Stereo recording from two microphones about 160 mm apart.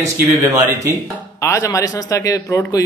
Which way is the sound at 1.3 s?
20° left (ahead or behind).